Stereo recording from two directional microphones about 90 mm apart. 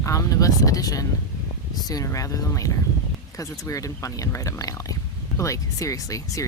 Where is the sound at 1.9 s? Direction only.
40° left (ahead or behind).